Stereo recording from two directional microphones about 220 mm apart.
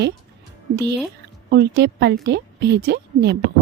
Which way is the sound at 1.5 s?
50° right (ahead or behind).